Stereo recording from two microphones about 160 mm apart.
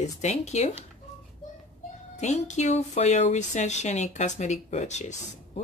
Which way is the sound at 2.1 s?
45° left (ahead or behind).